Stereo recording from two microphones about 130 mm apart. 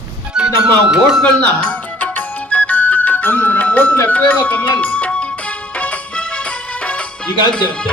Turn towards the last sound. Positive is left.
turn(degrees=5)  # may be behind; listen again after turning